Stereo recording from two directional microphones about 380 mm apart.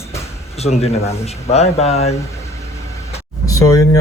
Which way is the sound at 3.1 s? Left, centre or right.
Centre.